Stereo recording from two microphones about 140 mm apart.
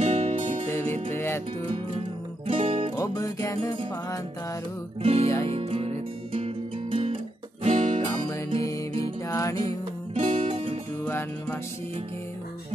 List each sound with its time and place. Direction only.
0.0 s music: 45° right (ahead or behind)
0.7 s music: 20° left (ahead or behind)
2.4 s music: 45° right (ahead or behind)
3.0 s music: 25° left (ahead or behind)
5.0 s music: 45° right (ahead or behind)
7.6 s music: 50° right (ahead or behind)
9.3 s music: 25° left (ahead or behind)
10.1 s music: 45° right (ahead or behind)
11.1 s music: 15° left (ahead or behind)